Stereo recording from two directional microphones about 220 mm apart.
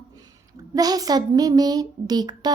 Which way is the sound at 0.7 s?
15° right (ahead or behind).